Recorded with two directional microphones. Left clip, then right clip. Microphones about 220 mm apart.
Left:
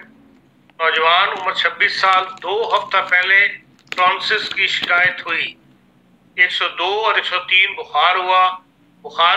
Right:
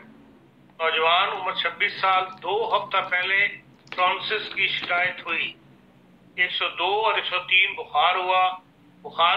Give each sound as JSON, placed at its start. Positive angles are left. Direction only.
{"t": 0.7, "sound": "a man's voice", "side_deg": 30}